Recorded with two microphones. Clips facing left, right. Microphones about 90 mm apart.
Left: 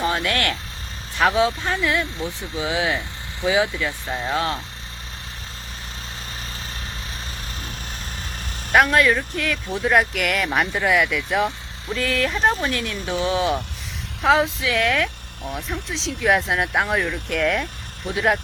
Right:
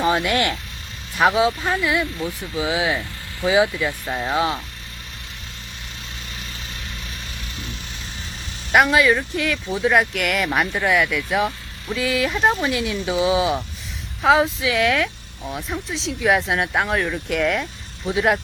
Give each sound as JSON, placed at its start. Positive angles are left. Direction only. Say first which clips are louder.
{"t": 0.0, "sound": "speech", "louder": "right 3 dB", "side_deg": -20}
{"t": 8.7, "sound": "speech", "louder": "right 1 dB", "side_deg": -5}